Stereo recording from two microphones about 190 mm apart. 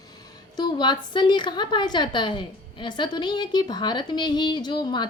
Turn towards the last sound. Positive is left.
turn(degrees=25)  # may be behind; listen again after turning